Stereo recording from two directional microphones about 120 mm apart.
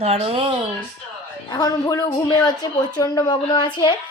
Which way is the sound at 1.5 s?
35° left (ahead or behind).